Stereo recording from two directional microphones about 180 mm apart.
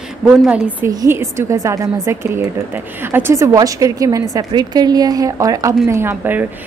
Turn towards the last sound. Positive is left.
turn(degrees=-10)  # may be behind; listen again after turning